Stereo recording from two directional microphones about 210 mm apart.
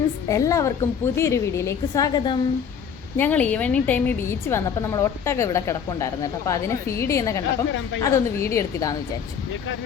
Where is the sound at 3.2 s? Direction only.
10° left (ahead or behind).